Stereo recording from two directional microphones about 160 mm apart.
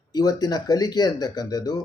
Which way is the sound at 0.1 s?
25° left (ahead or behind).